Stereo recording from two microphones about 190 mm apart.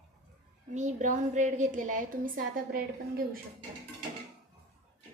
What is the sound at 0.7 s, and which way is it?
A woman's voice, 40° right (ahead or behind).